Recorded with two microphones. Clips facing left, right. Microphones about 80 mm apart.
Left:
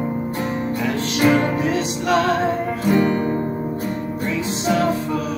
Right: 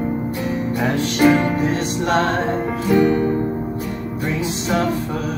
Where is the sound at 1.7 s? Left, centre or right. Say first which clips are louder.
Even; right.